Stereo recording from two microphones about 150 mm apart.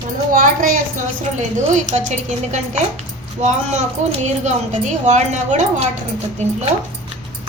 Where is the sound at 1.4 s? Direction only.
50° right (ahead or behind).